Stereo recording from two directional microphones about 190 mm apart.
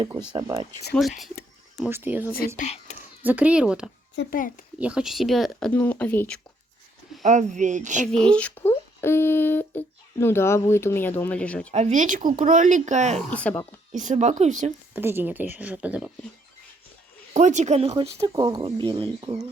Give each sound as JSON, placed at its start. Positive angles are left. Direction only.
{"t": 0.3, "sound": "speech", "side_deg": -20}
{"t": 0.9, "sound": "speech", "side_deg": 5}
{"t": 1.8, "sound": "speech", "side_deg": -10}
{"t": 2.6, "sound": "speech", "side_deg": 35}
{"t": 3.2, "sound": "speech", "side_deg": -5}
{"t": 4.2, "sound": "a child's voice", "side_deg": 45}
{"t": 4.8, "sound": "speech", "side_deg": -5}
{"t": 7.2, "sound": "speech", "side_deg": -40}
{"t": 8.2, "sound": "speech", "side_deg": 5}
{"t": 11.7, "sound": "speech", "side_deg": -40}
{"t": 14.9, "sound": "speech", "side_deg": -10}
{"t": 17.3, "sound": "speech", "side_deg": -40}
{"t": 18.2, "sound": "speech", "side_deg": -20}